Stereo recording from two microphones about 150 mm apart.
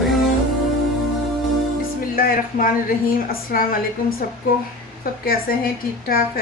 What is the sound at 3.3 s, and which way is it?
Speech, 70° left (ahead or behind).